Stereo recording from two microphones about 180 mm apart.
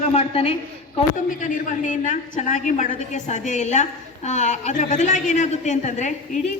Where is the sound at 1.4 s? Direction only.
45° left (ahead or behind).